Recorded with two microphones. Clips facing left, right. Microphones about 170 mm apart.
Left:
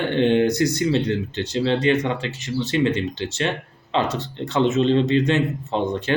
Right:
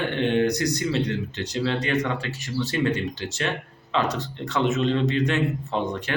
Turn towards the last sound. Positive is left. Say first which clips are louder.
# left 4 dB
turn(degrees=25)  # may be behind; listen again after turning